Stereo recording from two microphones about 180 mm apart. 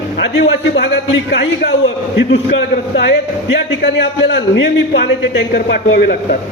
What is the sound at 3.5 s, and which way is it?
A man's voice, 75° left (ahead or behind).